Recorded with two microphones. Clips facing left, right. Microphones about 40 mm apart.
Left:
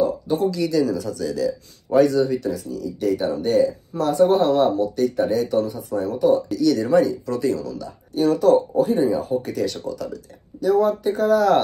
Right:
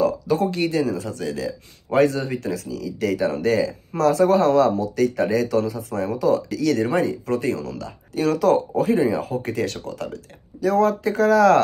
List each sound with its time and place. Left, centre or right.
0.0 s a sound: right
0.5 s speech: right
9.4 s speech: right